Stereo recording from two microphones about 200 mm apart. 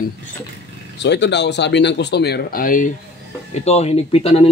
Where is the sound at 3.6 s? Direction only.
30° left (ahead or behind).